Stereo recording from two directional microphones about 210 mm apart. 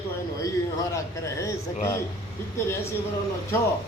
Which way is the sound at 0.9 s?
15° left (ahead or behind).